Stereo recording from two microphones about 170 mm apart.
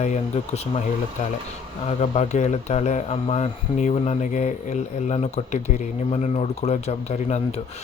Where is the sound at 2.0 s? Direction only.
45° left (ahead or behind).